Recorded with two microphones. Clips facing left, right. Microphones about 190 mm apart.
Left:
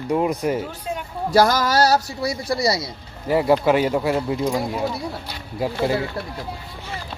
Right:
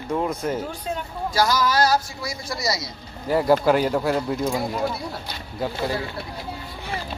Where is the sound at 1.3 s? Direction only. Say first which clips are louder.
Left 4 dB; 55° left (ahead or behind); by 2.0 s 40° left (ahead or behind).